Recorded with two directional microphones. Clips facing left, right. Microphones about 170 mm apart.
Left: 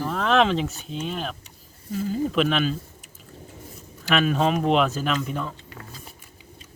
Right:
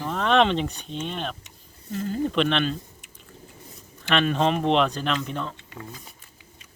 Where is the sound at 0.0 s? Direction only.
Centre (ahead or behind).